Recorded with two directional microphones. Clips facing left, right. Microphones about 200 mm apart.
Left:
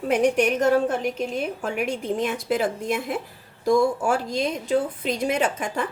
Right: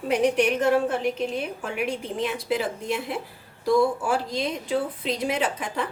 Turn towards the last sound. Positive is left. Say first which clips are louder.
# left 2 dB
turn(degrees=45)  # may be behind; listen again after turning